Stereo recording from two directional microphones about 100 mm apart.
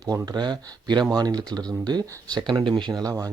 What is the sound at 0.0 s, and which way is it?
Speech, 40° right (ahead or behind).